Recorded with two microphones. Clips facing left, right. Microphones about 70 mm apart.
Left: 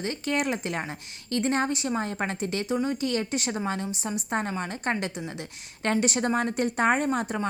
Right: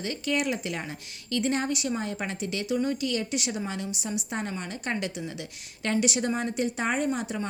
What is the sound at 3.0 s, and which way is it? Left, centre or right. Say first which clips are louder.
A woman's voice: left 2 dB; left.